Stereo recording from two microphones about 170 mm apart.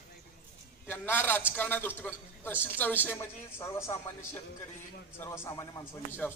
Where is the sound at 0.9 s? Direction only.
10° left (ahead or behind).